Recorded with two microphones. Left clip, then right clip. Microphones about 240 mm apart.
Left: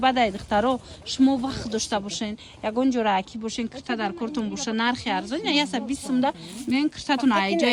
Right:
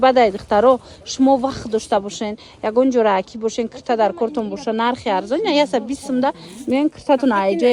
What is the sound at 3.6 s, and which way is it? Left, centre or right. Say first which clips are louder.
A woman's voice: right 11 dB; centre.